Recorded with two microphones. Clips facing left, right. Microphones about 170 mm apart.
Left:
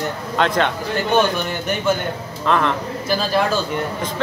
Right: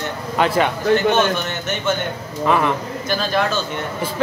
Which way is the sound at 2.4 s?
10° right (ahead or behind).